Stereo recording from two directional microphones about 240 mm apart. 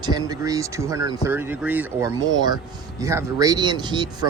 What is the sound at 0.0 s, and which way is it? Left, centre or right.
Speech, centre.